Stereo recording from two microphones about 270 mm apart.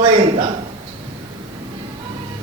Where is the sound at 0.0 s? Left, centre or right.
Centre.